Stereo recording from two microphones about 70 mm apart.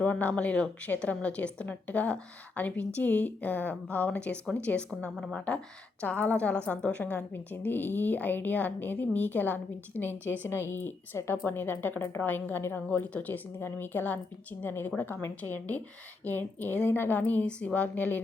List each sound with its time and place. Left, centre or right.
0.0 s a woman's voice: left
17.8 s a woman's voice: left